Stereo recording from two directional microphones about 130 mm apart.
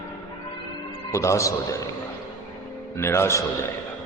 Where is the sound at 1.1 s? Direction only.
25° left (ahead or behind).